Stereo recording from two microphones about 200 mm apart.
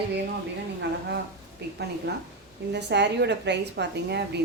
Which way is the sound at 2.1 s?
55° right (ahead or behind).